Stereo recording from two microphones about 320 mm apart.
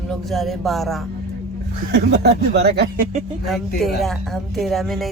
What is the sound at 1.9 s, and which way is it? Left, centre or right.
Speech, right.